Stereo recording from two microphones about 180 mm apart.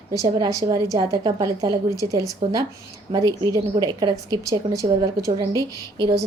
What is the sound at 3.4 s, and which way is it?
A woman's voice, 20° right (ahead or behind).